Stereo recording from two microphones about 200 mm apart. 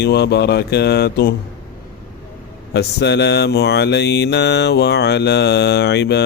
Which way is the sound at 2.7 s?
55° left (ahead or behind).